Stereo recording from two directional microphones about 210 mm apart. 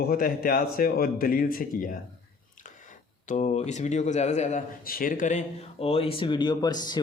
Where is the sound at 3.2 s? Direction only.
35° left (ahead or behind).